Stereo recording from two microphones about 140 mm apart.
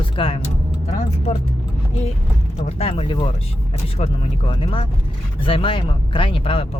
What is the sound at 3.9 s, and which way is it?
Speech, 50° left (ahead or behind).